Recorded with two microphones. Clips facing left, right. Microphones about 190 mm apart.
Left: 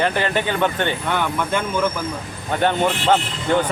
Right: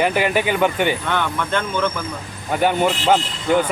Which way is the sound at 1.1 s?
10° left (ahead or behind).